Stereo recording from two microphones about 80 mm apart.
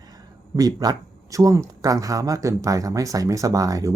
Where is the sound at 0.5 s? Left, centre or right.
Right.